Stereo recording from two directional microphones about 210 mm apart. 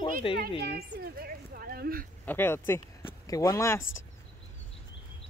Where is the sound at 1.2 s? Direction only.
45° right (ahead or behind).